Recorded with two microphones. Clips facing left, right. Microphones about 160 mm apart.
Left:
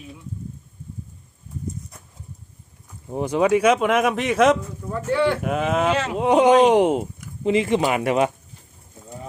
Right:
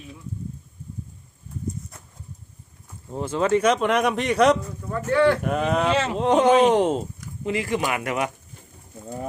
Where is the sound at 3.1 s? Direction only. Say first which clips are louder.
Left 3 dB; 15° left (ahead or behind).